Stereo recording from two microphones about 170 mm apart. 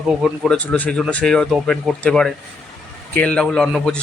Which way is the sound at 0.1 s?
5° right (ahead or behind).